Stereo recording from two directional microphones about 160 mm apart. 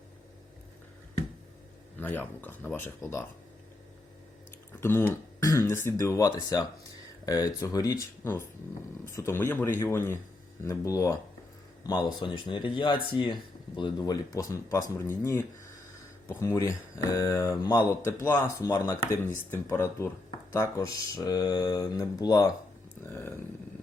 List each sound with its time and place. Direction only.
2.0 s speech: 10° left (ahead or behind)
4.8 s speech: 15° left (ahead or behind)